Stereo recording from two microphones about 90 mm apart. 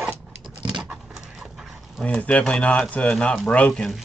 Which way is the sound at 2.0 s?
15° left (ahead or behind).